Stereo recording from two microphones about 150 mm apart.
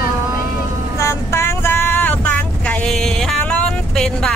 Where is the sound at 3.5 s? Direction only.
5° left (ahead or behind).